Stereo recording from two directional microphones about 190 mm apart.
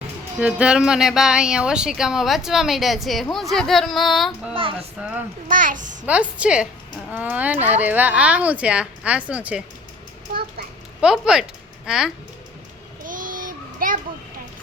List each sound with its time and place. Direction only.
0.3 s speech: 5° right (ahead or behind)
4.5 s a sound: 30° right (ahead or behind)
4.9 s speech: 5° right (ahead or behind)
5.5 s a child's voice: 45° right (ahead or behind)
6.1 s speech: 5° right (ahead or behind)
11.0 s speech: 5° right (ahead or behind)
13.1 s child singing: 45° right (ahead or behind)